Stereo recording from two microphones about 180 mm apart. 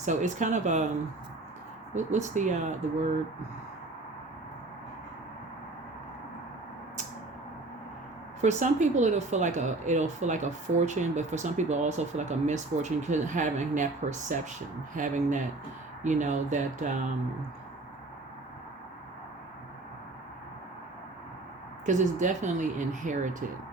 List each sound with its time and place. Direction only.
0.0 s speech: 45° right (ahead or behind)
1.9 s speech: 40° right (ahead or behind)
8.4 s speech: 40° right (ahead or behind)
21.8 s speech: 45° right (ahead or behind)